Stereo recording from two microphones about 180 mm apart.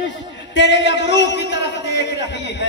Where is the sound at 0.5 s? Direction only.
80° left.